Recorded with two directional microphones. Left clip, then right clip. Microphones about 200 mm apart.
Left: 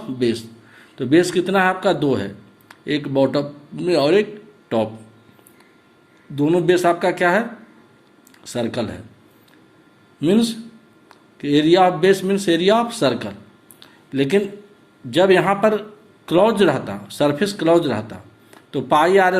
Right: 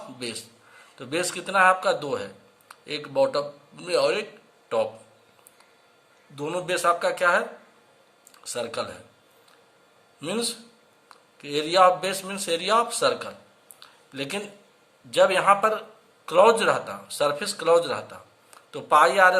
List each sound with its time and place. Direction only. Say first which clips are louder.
0.2 s a man's voice: left 15 dB; 10° left (ahead or behind)
6.3 s a man's voice: left 11 dB; 5° left (ahead or behind)
8.5 s a man's voice: left 6 dB; 10° left (ahead or behind)
10.2 s a man's voice: left 10 dB; 10° left (ahead or behind)
13.7 s a sound: left 12 dB; 10° left (ahead or behind)
15.1 s a man's voice: left 3 dB; 10° left (ahead or behind)